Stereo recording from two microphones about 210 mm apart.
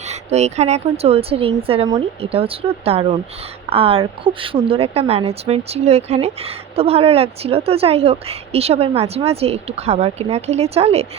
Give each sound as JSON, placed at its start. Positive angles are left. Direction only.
{"t": 0.1, "sound": "a woman's voice", "side_deg": -30}